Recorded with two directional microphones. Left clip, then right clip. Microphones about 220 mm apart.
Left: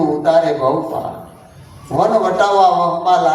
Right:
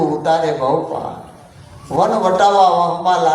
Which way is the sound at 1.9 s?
35° right (ahead or behind).